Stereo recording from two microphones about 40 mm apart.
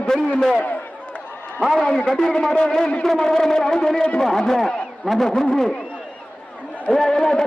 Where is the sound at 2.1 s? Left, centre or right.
Centre.